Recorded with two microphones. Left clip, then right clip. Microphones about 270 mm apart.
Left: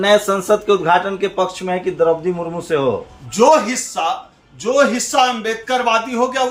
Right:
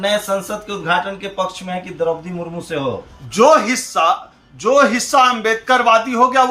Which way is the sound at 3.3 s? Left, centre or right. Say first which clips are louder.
Right 1 dB; centre.